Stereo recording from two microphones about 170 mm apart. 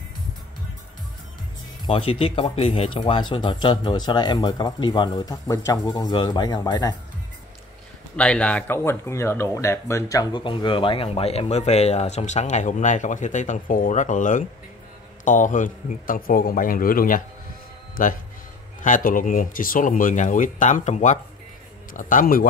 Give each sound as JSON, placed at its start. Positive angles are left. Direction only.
{"t": 1.9, "sound": "speech", "side_deg": 35}
{"t": 8.2, "sound": "a man's voice", "side_deg": 5}